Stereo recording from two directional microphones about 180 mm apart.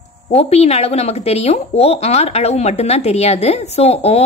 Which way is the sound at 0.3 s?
35° left (ahead or behind).